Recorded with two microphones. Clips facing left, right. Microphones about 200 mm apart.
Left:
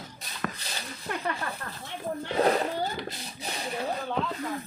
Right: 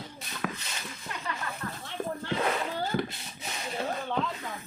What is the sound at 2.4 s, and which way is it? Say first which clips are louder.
Splash: left 7 dB; 35° left (ahead or behind).